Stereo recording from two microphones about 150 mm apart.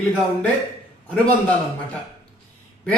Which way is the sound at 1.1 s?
5° left (ahead or behind).